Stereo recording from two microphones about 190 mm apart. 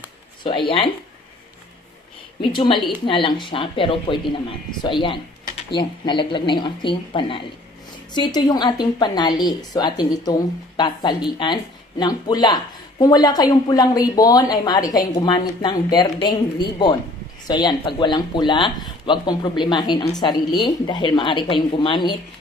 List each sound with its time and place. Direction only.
0.4 s a woman's voice: 25° left (ahead or behind)
2.4 s a woman's voice: 25° left (ahead or behind)